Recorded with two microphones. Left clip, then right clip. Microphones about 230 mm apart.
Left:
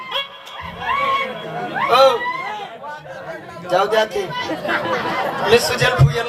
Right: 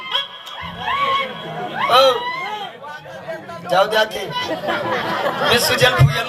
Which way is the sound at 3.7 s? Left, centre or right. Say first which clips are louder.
Right 1 dB; right.